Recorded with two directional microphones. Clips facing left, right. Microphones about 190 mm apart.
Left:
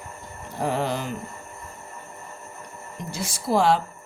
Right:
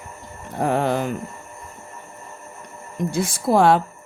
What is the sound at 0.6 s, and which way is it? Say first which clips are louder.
Speech: right 5 dB; 55° right (ahead or behind).